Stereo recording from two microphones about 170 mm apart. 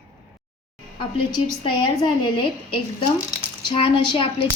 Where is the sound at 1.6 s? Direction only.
25° left (ahead or behind).